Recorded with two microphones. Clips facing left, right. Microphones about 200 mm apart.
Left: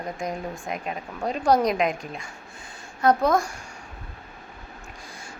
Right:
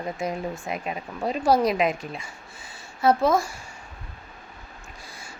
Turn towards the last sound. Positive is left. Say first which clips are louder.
# even
turn(degrees=-5)  # may be behind; listen again after turning